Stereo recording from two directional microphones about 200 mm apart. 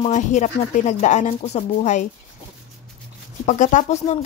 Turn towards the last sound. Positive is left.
turn(degrees=35)  # may be behind; listen again after turning